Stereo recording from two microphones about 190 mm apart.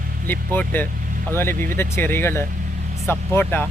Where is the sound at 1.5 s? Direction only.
45° right (ahead or behind).